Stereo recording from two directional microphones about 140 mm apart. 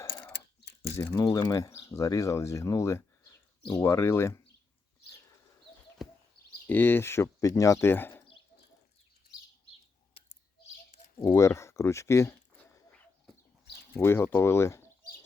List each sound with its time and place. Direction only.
0.8 s speech: 20° left (ahead or behind)
6.0 s a sound: centre (ahead or behind)
6.7 s speech: 15° left (ahead or behind)
11.2 s speech: 20° left (ahead or behind)
13.9 s speech: 15° left (ahead or behind)